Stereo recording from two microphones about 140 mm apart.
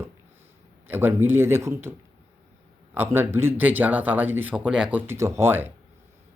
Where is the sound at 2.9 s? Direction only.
15° right (ahead or behind).